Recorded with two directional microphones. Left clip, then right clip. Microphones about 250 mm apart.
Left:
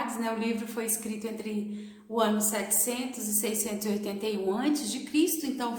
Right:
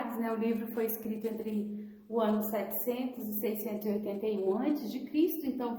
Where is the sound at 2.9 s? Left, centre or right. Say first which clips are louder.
Left 2 dB; centre.